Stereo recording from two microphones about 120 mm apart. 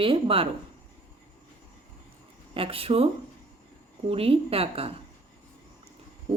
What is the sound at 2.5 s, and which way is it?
Speech, 50° right (ahead or behind).